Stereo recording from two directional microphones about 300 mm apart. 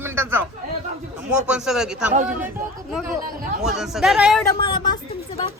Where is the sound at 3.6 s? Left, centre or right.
Centre.